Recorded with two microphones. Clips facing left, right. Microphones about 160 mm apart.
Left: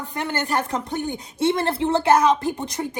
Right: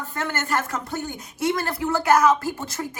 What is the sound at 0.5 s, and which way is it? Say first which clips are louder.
A woman's voice: left 2 dB; 15° left (ahead or behind).